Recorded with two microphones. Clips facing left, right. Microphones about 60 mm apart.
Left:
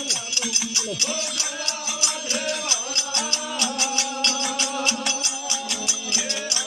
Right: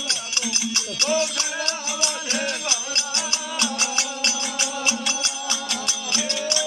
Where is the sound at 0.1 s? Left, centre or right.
Right.